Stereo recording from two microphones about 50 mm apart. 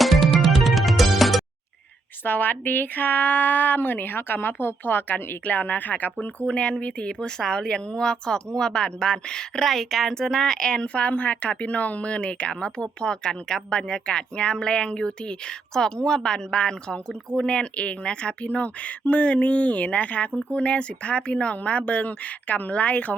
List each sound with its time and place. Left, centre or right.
0.0 s music: centre
2.2 s a woman's voice: left; by 9.6 s centre
9.6 s a woman's voice: centre; by 23.1 s left